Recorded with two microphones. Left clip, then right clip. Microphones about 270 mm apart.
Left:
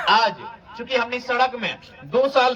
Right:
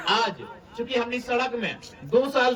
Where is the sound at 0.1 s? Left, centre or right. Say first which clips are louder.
Left 6 dB; centre.